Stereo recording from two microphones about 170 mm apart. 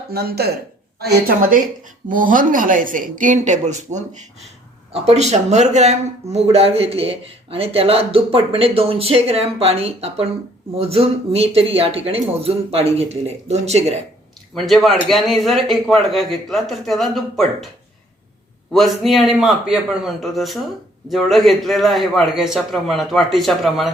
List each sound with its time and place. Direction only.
0.1 s a woman's voice: 65° right (ahead or behind); by 14.0 s 40° right (ahead or behind)
14.5 s a man's voice: centre (ahead or behind)
18.7 s a man's voice: centre (ahead or behind)